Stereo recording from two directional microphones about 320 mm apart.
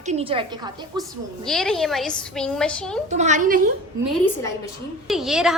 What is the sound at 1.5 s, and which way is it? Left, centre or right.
A woman's voice, centre.